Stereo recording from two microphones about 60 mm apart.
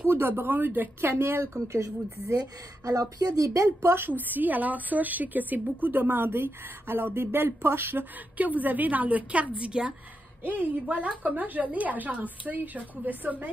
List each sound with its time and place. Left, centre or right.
0.0 s speech: right
1.5 s speech: right
2.3 s speech: right
3.6 s speech: right
4.2 s a woman's voice: right